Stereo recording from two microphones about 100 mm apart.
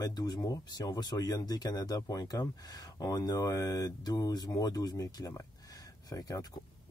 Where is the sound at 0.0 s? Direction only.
40° left (ahead or behind).